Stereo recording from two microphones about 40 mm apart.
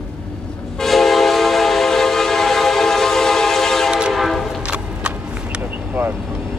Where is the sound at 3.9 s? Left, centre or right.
Centre.